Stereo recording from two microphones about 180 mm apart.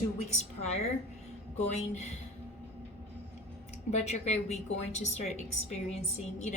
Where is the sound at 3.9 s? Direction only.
40° left (ahead or behind).